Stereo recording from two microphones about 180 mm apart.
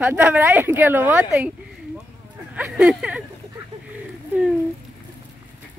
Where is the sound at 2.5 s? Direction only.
5° right (ahead or behind).